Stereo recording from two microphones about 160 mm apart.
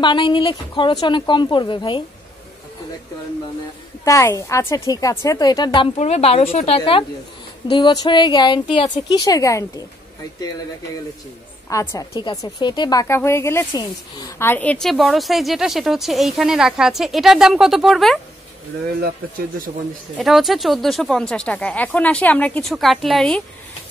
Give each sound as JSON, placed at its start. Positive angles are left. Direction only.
{"t": 0.0, "sound": "a woman's voice", "side_deg": 30}
{"t": 4.0, "sound": "a woman's voice", "side_deg": 20}
{"t": 5.9, "sound": "a woman's voice", "side_deg": 40}
{"t": 11.7, "sound": "a woman's voice", "side_deg": 20}
{"t": 14.4, "sound": "a woman's voice", "side_deg": 10}
{"t": 20.2, "sound": "a woman's voice", "side_deg": 0}